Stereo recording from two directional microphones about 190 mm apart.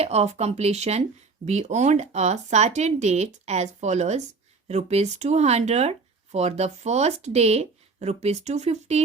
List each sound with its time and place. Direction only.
0.0 s speech: 35° right (ahead or behind)